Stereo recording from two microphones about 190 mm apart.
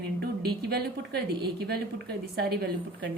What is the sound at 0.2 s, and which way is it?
A woman's voice, 60° right (ahead or behind).